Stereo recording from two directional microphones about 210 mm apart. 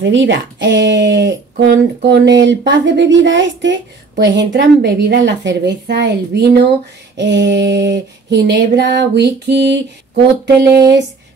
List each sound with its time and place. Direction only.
0.0 s female singing: 60° right (ahead or behind)